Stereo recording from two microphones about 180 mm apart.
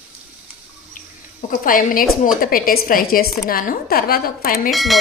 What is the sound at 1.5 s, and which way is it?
A woman's voice, 50° left (ahead or behind).